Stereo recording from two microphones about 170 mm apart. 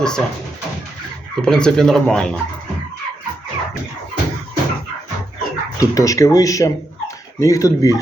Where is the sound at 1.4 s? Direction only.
5° left (ahead or behind).